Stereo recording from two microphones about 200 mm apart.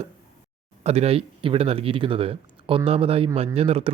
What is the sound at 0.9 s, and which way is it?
A man's voice, 30° right (ahead or behind).